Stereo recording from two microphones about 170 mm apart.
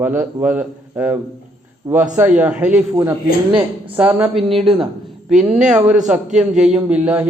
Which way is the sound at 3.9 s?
10° right (ahead or behind).